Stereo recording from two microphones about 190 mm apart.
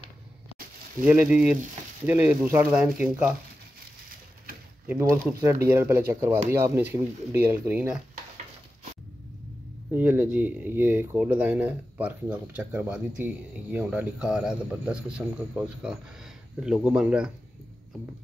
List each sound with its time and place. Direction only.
1.0 s speech: 5° right (ahead or behind)
5.1 s speech: 15° right (ahead or behind)
9.9 s a man's voice: 10° right (ahead or behind)